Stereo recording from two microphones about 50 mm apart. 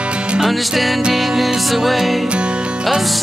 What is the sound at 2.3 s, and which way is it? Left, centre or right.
Music, centre.